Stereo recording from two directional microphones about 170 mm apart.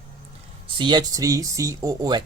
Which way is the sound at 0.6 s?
25° right (ahead or behind).